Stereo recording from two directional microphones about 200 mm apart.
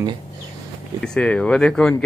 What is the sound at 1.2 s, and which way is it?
Speech, 5° left (ahead or behind).